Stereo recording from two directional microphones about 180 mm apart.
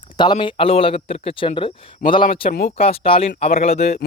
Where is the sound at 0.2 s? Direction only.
25° left (ahead or behind).